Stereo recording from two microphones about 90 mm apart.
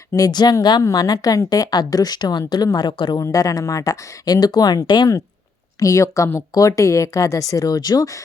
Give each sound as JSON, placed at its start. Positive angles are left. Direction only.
{"t": 0.1, "sound": "speech", "side_deg": 45}
{"t": 3.3, "sound": "speech", "side_deg": 40}
{"t": 5.8, "sound": "speech", "side_deg": 35}